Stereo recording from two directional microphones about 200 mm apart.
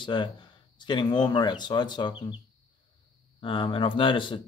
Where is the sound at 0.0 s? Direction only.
25° left (ahead or behind).